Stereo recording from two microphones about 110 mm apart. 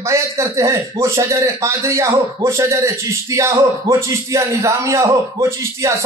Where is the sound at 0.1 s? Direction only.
25° right (ahead or behind).